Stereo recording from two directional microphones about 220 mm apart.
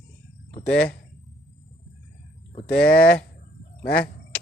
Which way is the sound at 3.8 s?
45° left (ahead or behind).